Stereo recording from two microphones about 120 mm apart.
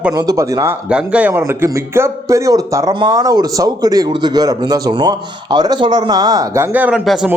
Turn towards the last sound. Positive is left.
turn(degrees=-5)  # may be behind; listen again after turning